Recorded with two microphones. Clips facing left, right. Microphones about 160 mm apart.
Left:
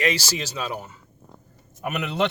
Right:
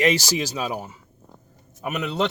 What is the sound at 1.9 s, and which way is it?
Speech, centre (ahead or behind).